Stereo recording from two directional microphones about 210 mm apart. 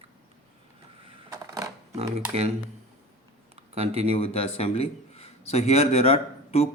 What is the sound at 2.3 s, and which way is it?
Speech, 35° right (ahead or behind).